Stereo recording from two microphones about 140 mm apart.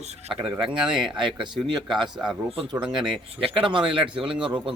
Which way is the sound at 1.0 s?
35° right (ahead or behind).